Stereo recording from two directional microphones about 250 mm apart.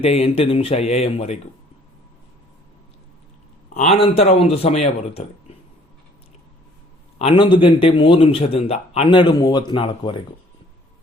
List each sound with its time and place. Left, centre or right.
0.0 s a man's voice: left
3.8 s a man's voice: left
7.2 s a man's voice: left